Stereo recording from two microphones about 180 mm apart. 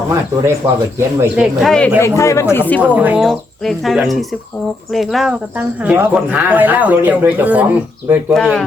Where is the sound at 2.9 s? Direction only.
10° right (ahead or behind).